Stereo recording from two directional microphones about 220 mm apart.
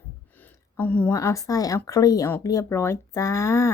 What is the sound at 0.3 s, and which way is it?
A woman's voice, 10° left (ahead or behind).